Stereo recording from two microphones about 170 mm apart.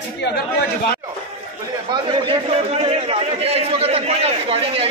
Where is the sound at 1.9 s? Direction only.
30° right (ahead or behind).